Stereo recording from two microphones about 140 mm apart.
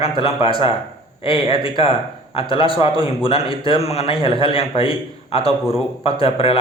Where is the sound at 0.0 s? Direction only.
40° left (ahead or behind).